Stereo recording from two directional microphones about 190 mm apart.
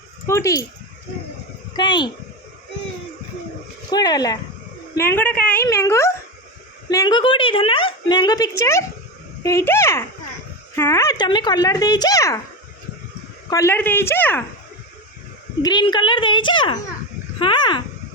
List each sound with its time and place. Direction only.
0.3 s speech: 15° left (ahead or behind)
1.7 s a woman's voice: 25° left (ahead or behind)
3.9 s a woman's voice: 20° left (ahead or behind)
13.5 s speech: 15° left (ahead or behind)
15.6 s a woman's voice: 20° left (ahead or behind)